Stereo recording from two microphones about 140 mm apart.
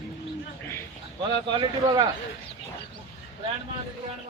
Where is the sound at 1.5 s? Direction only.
35° right (ahead or behind).